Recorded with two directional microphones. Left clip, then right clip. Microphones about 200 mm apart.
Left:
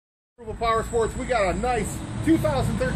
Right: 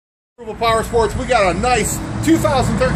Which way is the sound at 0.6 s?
40° left (ahead or behind).